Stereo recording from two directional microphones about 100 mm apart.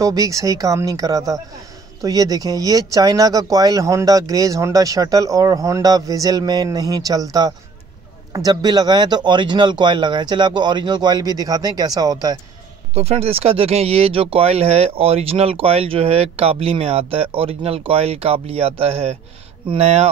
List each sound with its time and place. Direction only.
0.0 s speech: 35° right (ahead or behind)
12.9 s speech: 90° right